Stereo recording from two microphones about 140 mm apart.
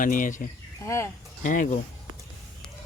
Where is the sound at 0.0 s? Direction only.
70° left (ahead or behind).